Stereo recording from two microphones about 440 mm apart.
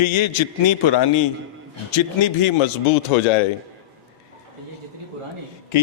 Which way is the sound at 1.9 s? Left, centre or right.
Left.